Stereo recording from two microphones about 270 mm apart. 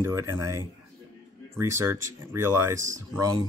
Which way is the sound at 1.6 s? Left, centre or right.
Centre.